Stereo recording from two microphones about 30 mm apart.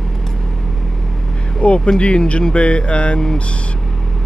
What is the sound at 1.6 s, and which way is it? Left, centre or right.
Speech, left.